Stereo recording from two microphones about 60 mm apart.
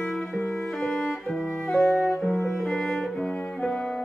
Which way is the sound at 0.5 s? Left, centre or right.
Centre.